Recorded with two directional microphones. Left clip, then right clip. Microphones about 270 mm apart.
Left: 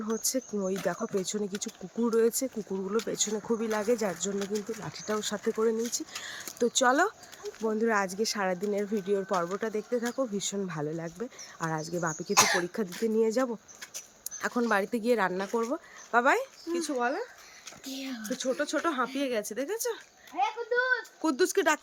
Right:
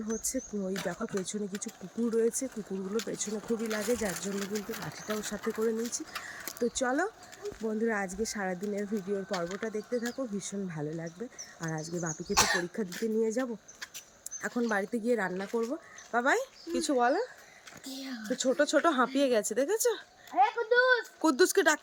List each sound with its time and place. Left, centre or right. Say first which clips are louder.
0.1 s speech: left 4 dB; centre
9.5 s speech: left 3 dB; centre
13.1 s speech: left 4 dB; centre
14.3 s a sound: left 4 dB; centre
14.7 s speech: left 3 dB; centre
16.7 s speech: right 3 dB; centre